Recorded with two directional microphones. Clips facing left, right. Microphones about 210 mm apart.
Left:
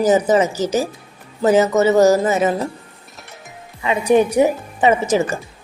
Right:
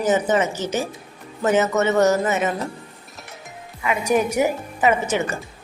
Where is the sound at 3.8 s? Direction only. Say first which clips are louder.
Left 5 dB; 30° left (ahead or behind).